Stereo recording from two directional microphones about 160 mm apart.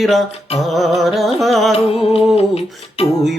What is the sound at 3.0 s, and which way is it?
Music, 40° left (ahead or behind).